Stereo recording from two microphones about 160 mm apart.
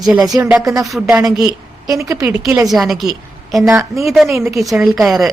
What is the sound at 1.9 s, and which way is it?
Speech, 20° right (ahead or behind).